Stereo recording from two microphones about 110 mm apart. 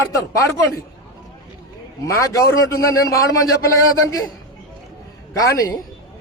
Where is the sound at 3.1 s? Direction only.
30° left (ahead or behind).